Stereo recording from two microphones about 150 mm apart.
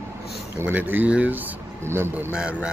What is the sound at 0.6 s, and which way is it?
Speech, 10° right (ahead or behind).